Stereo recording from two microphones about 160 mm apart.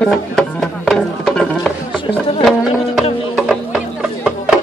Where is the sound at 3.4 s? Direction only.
Centre (ahead or behind).